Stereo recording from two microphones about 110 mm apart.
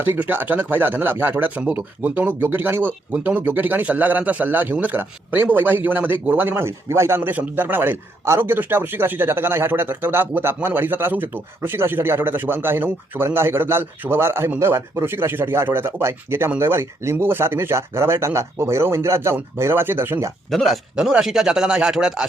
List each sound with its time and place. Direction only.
0.0 s speech: 20° right (ahead or behind)
20.5 s speech: centre (ahead or behind)